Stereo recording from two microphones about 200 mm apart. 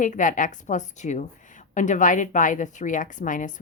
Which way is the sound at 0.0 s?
40° left (ahead or behind).